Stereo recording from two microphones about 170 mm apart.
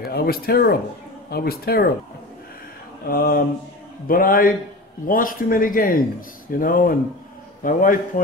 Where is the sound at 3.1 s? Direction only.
60° left (ahead or behind).